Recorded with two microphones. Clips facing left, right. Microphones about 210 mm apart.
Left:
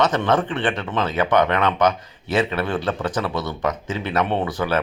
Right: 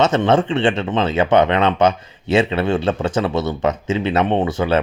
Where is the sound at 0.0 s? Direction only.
25° right (ahead or behind).